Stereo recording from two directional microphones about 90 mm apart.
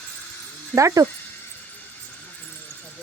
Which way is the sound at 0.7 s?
35° right (ahead or behind).